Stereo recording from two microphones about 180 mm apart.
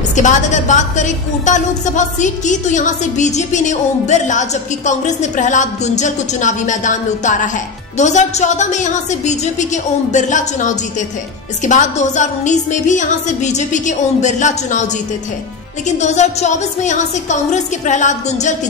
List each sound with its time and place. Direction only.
0.1 s a woman's voice: 40° left (ahead or behind)
16.0 s a woman's voice: 40° left (ahead or behind)